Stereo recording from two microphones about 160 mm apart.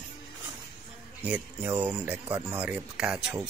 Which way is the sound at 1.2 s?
10° right (ahead or behind).